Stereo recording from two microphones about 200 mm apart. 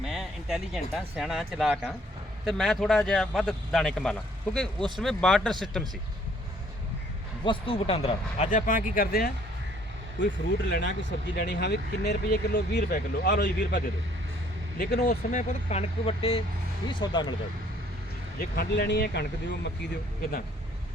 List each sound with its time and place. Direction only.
0.0 s speech: centre (ahead or behind)
7.4 s speech: 25° left (ahead or behind); by 9.3 s 45° left (ahead or behind)
10.2 s speech: 65° left (ahead or behind)
14.8 s speech: 45° left (ahead or behind); by 17.3 s 20° left (ahead or behind)
18.3 s speech: 50° left (ahead or behind)